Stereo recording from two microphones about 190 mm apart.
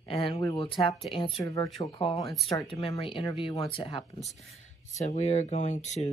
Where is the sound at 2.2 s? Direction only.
Centre (ahead or behind).